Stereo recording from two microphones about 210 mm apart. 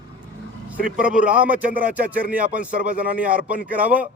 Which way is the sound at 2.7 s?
40° right (ahead or behind).